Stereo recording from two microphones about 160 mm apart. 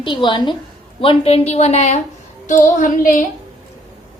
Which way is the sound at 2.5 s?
55° left (ahead or behind).